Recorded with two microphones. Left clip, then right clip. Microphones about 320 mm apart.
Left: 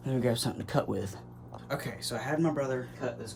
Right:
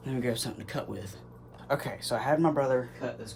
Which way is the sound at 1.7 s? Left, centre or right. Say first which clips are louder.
Right 5 dB; centre.